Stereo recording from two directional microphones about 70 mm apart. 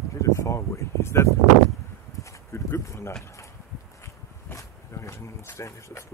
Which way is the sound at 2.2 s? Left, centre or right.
Left.